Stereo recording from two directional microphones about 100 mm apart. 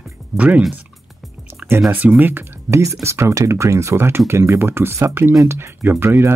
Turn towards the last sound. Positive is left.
turn(degrees=-25)  # may be behind; listen again after turning